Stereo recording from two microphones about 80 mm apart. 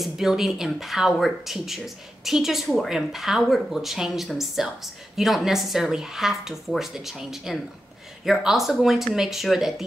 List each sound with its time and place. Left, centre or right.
0.0 s speech: centre